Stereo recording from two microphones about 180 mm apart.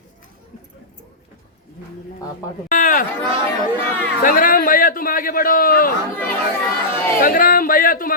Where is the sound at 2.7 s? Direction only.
45° left (ahead or behind).